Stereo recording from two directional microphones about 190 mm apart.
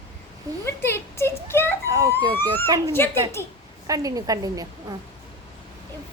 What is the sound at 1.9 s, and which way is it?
Emergency vehicle, 15° right (ahead or behind).